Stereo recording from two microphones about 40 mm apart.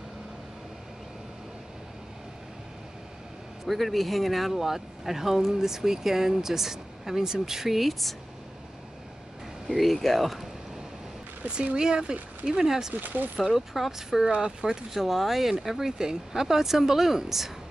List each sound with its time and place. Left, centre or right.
3.6 s speech: centre
9.7 s speech: centre
11.4 s speech: right
12.9 s speech: right
13.4 s speech: centre
14.3 s speech: centre
15.0 s speech: centre